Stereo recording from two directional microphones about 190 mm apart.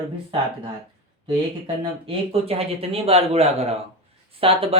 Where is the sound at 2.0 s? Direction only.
30° right (ahead or behind).